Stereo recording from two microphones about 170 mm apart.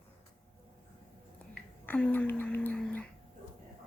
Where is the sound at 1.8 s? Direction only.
10° left (ahead or behind).